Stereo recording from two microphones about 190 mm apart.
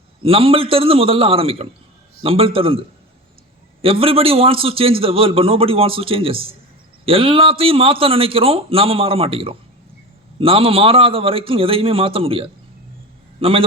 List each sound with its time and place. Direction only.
0.2 s a man's voice: 30° right (ahead or behind)